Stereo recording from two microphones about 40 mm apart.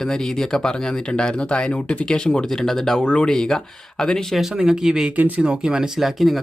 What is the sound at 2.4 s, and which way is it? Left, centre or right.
Speech, centre.